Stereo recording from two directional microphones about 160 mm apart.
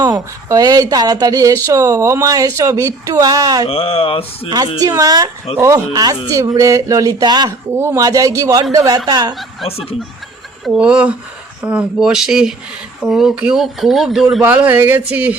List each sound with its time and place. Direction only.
0.0 s speech: 25° right (ahead or behind)
3.7 s speech: 40° left (ahead or behind)
4.4 s speech: 25° right (ahead or behind)
10.7 s speech: 5° right (ahead or behind)